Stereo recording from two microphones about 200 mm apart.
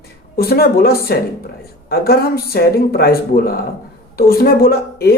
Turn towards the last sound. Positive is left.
turn(degrees=50)  # may be behind; listen again after turning